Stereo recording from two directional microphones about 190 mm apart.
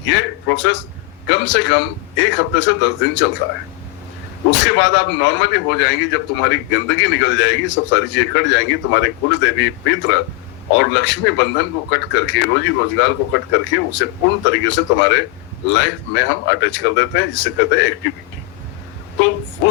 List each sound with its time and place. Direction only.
0.0 s a man's voice: 70° left (ahead or behind)
4.6 s a man's voice: 70° left (ahead or behind)